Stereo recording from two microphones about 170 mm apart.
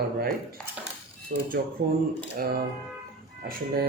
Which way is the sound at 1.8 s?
55° right (ahead or behind).